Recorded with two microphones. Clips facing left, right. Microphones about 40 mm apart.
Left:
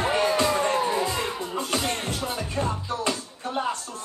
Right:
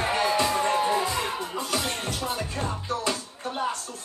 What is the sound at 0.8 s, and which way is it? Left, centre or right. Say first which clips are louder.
Music: even; right.